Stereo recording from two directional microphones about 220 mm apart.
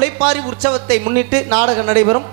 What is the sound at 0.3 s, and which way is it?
Speech, 15° right (ahead or behind).